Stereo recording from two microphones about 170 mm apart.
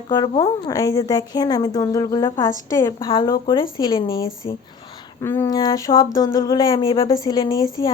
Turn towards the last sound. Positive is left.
turn(degrees=20)  # may be behind; listen again after turning